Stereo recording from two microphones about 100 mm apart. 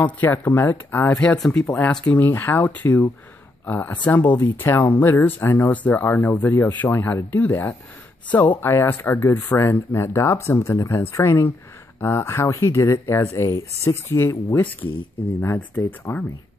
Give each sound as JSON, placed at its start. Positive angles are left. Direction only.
{"t": 0.0, "sound": "speech", "side_deg": 15}
{"t": 1.2, "sound": "speech", "side_deg": 10}
{"t": 2.1, "sound": "speech", "side_deg": 20}
{"t": 16.1, "sound": "speech", "side_deg": 40}